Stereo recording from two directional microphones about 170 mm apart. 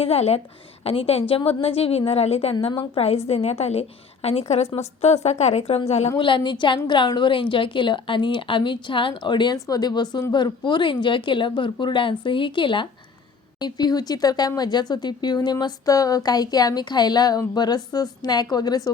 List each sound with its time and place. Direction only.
0.0 s a woman's voice: 35° left (ahead or behind)